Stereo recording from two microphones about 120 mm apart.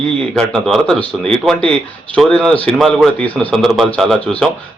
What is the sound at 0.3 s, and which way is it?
Speech, 5° left (ahead or behind).